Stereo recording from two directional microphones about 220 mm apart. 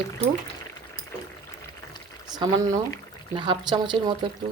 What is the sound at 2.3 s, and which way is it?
Speech, 15° right (ahead or behind).